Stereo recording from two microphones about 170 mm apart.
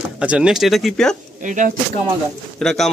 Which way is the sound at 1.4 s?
50° right (ahead or behind).